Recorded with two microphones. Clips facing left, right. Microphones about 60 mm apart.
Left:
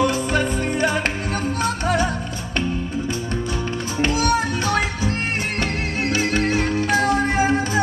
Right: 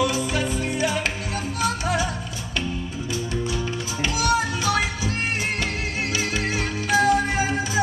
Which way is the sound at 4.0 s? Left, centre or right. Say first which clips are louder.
Left 3 dB; left.